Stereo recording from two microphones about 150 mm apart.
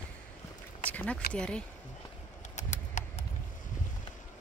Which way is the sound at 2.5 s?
50° left (ahead or behind).